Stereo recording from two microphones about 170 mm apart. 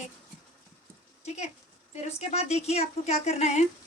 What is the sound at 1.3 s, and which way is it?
A woman's voice, 40° left (ahead or behind).